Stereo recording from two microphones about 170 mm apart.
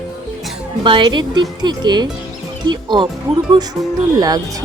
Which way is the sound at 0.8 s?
25° right (ahead or behind).